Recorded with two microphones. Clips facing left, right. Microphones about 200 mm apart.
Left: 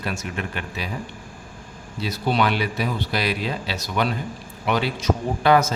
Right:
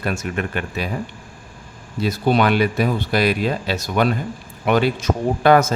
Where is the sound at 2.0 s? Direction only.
50° right (ahead or behind).